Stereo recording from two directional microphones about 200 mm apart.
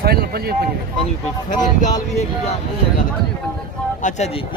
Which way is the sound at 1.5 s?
40° left (ahead or behind).